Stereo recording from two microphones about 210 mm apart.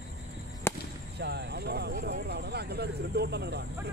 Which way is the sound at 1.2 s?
50° right (ahead or behind).